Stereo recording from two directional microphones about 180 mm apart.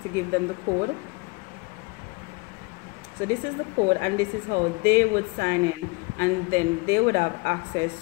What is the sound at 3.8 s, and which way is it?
Speech, 55° right (ahead or behind).